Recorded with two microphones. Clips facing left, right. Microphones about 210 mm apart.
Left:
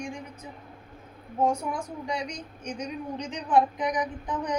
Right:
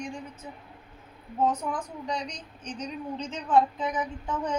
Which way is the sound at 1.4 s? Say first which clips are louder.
Left 1 dB; 10° left (ahead or behind).